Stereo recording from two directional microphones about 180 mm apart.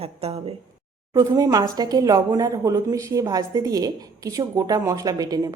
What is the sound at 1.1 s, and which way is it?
A woman's voice, 20° right (ahead or behind).